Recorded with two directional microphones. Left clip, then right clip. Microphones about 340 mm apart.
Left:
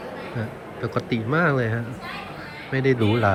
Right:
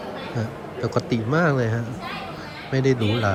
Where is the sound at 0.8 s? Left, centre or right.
Centre.